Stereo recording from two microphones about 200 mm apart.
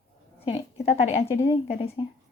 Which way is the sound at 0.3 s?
30° left (ahead or behind).